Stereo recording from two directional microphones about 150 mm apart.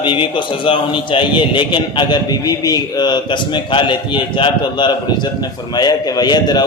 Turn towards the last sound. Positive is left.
turn(degrees=30)  # may be behind; listen again after turning